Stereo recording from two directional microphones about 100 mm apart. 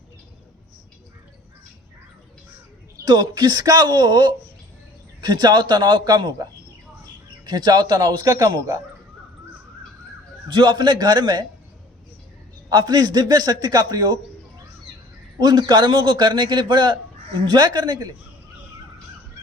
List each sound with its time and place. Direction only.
3.0 s a man's voice: 45° right (ahead or behind)
10.5 s a man's voice: 50° right (ahead or behind)
12.7 s a man's voice: 40° right (ahead or behind)
15.4 s a man's voice: 50° right (ahead or behind)